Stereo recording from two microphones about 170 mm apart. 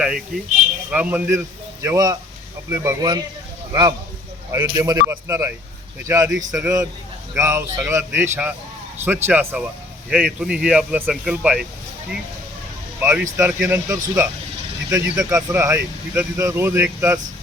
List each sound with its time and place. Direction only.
0.0 s speech: 5° right (ahead or behind)
1.8 s speech: 20° right (ahead or behind)
13.0 s speech: 10° right (ahead or behind)